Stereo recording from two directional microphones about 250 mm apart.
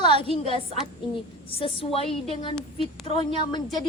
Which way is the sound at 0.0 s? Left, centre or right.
Centre.